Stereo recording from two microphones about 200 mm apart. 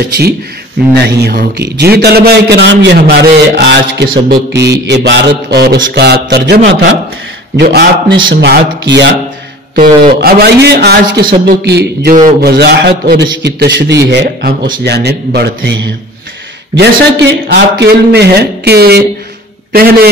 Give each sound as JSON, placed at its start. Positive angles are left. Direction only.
{"t": 1.0, "sound": "a man's voice", "side_deg": -50}
{"t": 9.8, "sound": "a man's voice", "side_deg": -50}